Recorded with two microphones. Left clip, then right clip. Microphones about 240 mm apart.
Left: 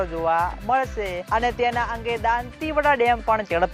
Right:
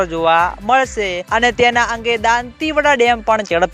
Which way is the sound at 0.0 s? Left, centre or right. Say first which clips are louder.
Right 8 dB; right.